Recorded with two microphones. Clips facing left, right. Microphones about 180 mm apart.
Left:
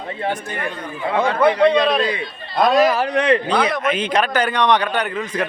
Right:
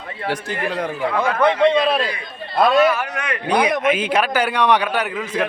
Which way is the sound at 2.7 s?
35° left (ahead or behind).